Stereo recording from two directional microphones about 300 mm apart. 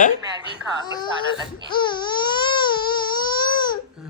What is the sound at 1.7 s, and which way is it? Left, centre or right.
Baby cry, centre.